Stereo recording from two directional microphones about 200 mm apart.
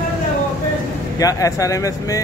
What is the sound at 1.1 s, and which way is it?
Speech, 15° left (ahead or behind).